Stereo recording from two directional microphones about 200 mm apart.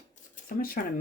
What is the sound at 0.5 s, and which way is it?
Speech, 45° left (ahead or behind).